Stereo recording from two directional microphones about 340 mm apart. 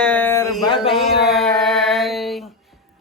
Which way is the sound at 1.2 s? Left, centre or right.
Centre.